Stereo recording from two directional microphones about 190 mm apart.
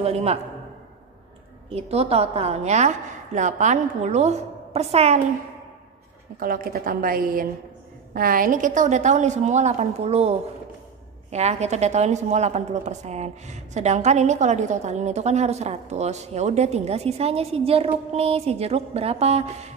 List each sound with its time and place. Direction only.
0.0 s a woman's voice: 35° right (ahead or behind)
1.7 s a woman's voice: 35° right (ahead or behind)
6.4 s a woman's voice: 50° right (ahead or behind); by 10.3 s 35° right (ahead or behind)
11.3 s a woman's voice: 35° right (ahead or behind)